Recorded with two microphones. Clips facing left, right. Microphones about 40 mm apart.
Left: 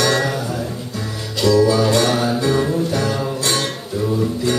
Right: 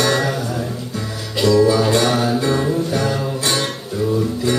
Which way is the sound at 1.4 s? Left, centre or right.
Right.